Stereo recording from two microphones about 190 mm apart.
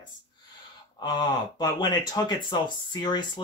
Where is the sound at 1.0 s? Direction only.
20° left (ahead or behind).